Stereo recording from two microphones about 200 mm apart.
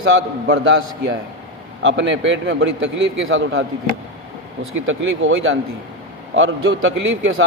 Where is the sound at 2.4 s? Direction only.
65° right (ahead or behind).